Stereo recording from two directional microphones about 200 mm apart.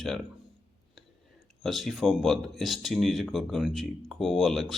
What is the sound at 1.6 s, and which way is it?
Speech, centre (ahead or behind).